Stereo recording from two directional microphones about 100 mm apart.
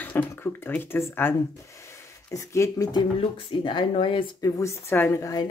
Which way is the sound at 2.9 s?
55° left (ahead or behind).